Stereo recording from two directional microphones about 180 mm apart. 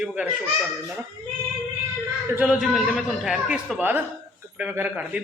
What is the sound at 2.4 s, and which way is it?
Speech, 5° right (ahead or behind).